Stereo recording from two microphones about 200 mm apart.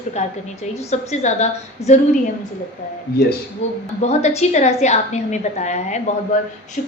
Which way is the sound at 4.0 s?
35° left (ahead or behind).